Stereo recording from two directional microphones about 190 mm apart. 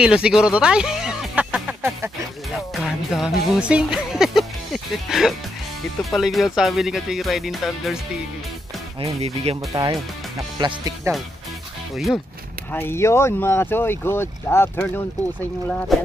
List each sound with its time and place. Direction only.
0.0 s music: 5° right (ahead or behind)
2.5 s music: centre (ahead or behind)
6.0 s speech: centre (ahead or behind)
9.0 s speech: 35° right (ahead or behind)
9.7 s speech: 15° right (ahead or behind)
11.9 s speech: centre (ahead or behind)
12.7 s speech: 15° left (ahead or behind)